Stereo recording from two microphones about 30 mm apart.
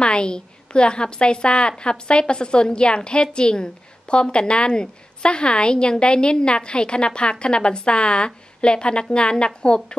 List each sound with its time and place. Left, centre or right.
0.0 s a woman's voice: left